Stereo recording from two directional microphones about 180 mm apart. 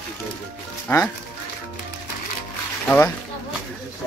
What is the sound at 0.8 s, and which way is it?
Speech, 15° left (ahead or behind).